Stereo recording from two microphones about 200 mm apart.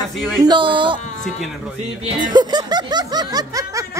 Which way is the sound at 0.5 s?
25° right (ahead or behind).